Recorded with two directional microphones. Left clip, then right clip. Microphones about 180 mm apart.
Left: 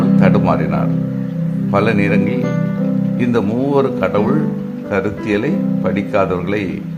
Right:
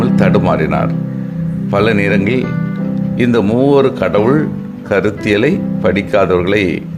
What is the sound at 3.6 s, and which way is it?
Speech, 20° right (ahead or behind).